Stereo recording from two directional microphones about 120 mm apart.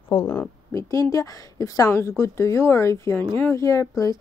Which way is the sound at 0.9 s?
30° left (ahead or behind).